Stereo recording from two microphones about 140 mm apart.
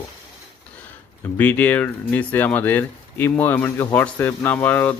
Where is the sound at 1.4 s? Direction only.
10° left (ahead or behind).